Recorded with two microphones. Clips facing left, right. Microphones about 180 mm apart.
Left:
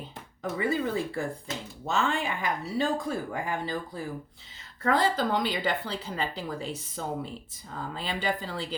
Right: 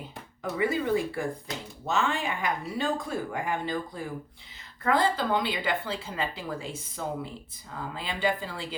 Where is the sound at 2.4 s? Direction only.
40° left (ahead or behind).